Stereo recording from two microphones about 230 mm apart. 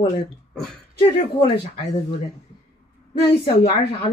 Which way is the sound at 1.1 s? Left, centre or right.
Left.